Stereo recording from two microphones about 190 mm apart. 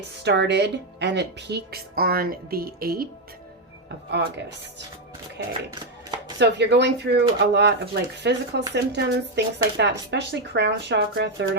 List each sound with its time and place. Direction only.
0.2 s speech: 65° right (ahead or behind)
4.1 s speech: 65° right (ahead or behind)